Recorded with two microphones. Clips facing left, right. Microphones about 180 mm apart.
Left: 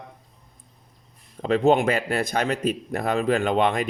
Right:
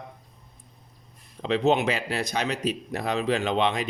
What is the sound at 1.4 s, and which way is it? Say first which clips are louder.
Speech: left 3 dB; 50° left (ahead or behind).